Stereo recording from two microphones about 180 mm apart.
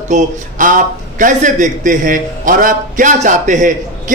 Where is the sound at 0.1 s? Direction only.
45° right (ahead or behind).